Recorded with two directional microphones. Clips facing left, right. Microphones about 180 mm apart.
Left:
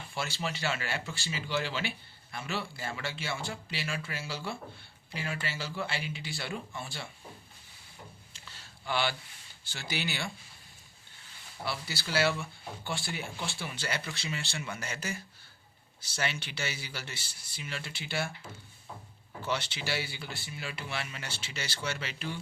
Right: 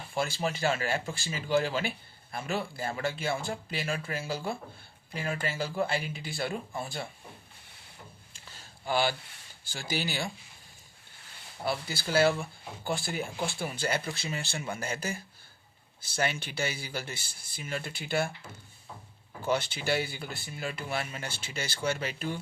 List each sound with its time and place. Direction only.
0.1 s speech: 45° right (ahead or behind)
8.5 s a sound: 45° right (ahead or behind)
9.7 s speech: 45° right (ahead or behind)
11.6 s speech: 50° right (ahead or behind)
14.0 s speech: 35° right (ahead or behind)
19.5 s speech: 50° right (ahead or behind)